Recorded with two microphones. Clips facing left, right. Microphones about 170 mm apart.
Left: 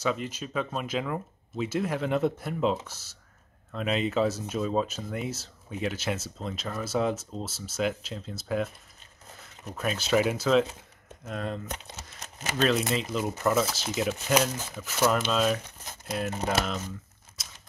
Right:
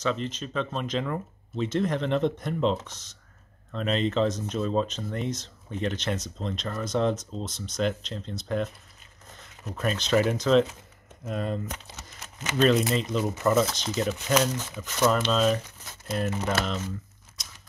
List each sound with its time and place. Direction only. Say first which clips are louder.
0.0 s speech: right 1 dB; 10° left (ahead or behind)
12.2 s crumpling: right 1 dB; 40° left (ahead or behind)
12.5 s speech: right 4 dB; centre (ahead or behind)
17.4 s tearing: even; centre (ahead or behind)